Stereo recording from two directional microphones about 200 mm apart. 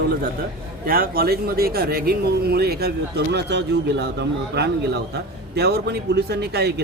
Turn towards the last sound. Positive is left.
turn(degrees=-55)  # may be behind; listen again after turning